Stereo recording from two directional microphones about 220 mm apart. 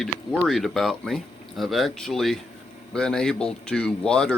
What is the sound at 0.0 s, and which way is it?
Speech, centre (ahead or behind).